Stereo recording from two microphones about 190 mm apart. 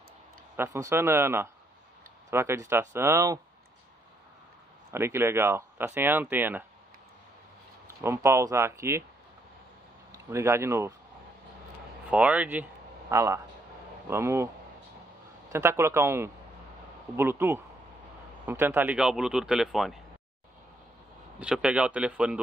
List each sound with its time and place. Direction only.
0.6 s speech: 15° right (ahead or behind)
4.9 s speech: 15° right (ahead or behind)
8.0 s speech: 15° right (ahead or behind)
10.1 s speech: 15° right (ahead or behind)
12.1 s speech: 5° right (ahead or behind)
15.5 s speech: 15° right (ahead or behind)
21.4 s speech: 5° right (ahead or behind)